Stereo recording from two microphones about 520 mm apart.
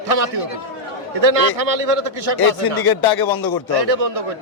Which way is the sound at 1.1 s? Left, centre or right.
Right.